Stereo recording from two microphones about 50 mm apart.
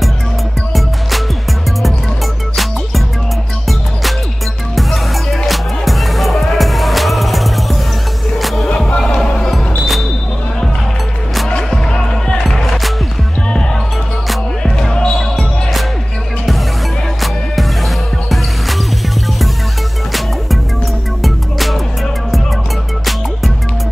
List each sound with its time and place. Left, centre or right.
2.5 s music: centre
4.7 s music: centre
9.0 s music: centre
9.5 s music: centre
11.4 s music: centre
14.6 s basketball bounce: centre
17.2 s music: centre
21.2 s music: centre